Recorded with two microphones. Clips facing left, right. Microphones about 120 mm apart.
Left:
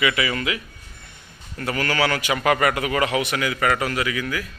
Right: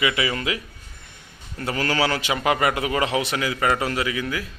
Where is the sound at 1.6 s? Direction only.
25° right (ahead or behind).